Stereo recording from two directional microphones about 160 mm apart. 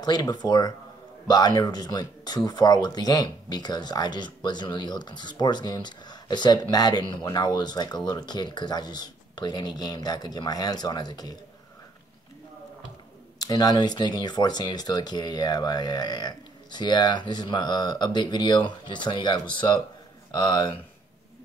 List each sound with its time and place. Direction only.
0.0 s speech: 25° left (ahead or behind)
13.4 s speech: 25° left (ahead or behind)